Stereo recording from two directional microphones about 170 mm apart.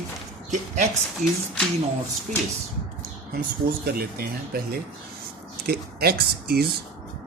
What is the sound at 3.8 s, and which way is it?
Speech, 60° right (ahead or behind).